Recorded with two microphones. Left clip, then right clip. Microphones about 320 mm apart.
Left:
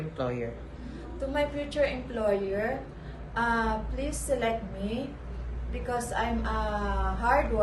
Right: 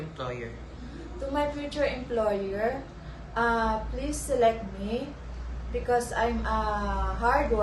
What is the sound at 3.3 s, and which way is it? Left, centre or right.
A woman's voice, centre.